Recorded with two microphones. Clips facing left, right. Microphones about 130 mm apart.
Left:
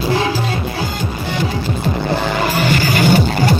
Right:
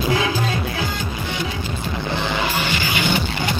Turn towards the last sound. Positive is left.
turn(degrees=45)  # may be behind; listen again after turning